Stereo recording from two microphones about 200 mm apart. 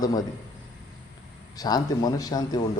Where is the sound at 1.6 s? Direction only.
20° left (ahead or behind).